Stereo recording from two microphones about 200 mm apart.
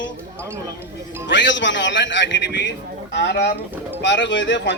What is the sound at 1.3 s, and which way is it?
A man's voice, 65° left (ahead or behind).